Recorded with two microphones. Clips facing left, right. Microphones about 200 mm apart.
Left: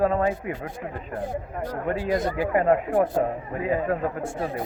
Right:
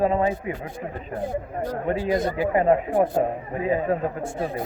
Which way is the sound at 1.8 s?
20° right (ahead or behind).